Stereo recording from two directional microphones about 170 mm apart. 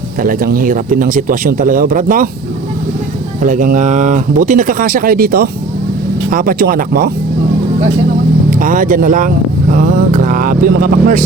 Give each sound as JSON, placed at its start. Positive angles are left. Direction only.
{"t": 0.2, "sound": "speech", "side_deg": -55}
{"t": 3.4, "sound": "speech", "side_deg": -50}
{"t": 8.4, "sound": "speech", "side_deg": -55}
{"t": 9.7, "sound": "a sound", "side_deg": -55}